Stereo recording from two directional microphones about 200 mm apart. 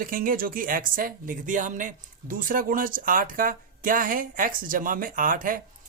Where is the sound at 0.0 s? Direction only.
45° right (ahead or behind).